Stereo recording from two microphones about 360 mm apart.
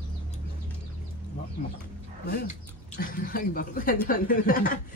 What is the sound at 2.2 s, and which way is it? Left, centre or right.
Speech, left.